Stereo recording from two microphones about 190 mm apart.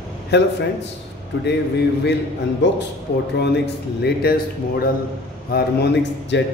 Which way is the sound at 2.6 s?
65° left (ahead or behind).